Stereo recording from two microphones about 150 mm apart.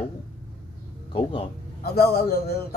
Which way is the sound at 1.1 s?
35° left (ahead or behind).